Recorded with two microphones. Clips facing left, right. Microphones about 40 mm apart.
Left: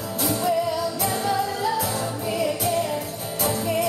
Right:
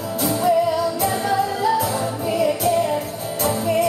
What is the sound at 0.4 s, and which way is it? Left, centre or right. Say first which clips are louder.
Music: right 6 dB; centre.